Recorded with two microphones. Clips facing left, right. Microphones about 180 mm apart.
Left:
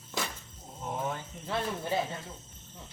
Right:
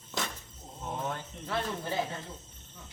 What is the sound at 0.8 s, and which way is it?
Speech, 10° left (ahead or behind).